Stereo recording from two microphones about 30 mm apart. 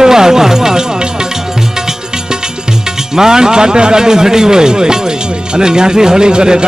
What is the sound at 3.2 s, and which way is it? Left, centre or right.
Speech, right.